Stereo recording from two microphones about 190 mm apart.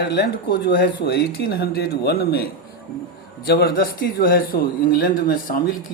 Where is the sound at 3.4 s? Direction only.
55° left (ahead or behind).